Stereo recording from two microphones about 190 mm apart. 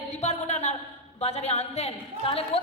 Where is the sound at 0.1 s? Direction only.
35° left (ahead or behind).